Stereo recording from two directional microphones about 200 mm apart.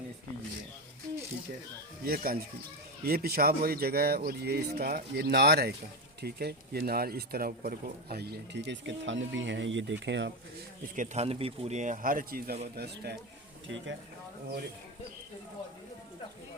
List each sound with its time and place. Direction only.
2.0 s speech: 45° right (ahead or behind); by 10.3 s 60° right (ahead or behind)
10.9 s a man's voice: 35° right (ahead or behind)